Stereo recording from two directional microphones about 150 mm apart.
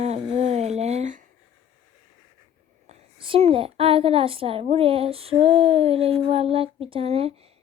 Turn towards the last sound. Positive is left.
turn(degrees=-40)  # may be behind; listen again after turning